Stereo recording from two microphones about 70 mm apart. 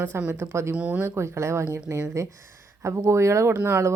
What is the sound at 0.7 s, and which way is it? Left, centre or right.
Speech, centre.